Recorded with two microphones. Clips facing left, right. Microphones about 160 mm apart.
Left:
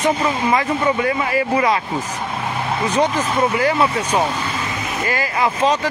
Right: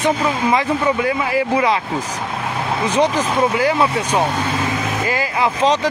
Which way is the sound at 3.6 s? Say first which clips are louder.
Even; 10° right (ahead or behind).